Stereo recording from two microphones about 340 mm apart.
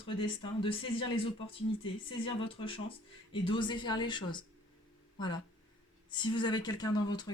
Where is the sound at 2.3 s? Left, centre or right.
Centre.